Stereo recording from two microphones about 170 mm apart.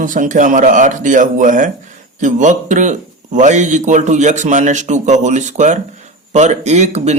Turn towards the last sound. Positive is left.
turn(degrees=-40)  # may be behind; listen again after turning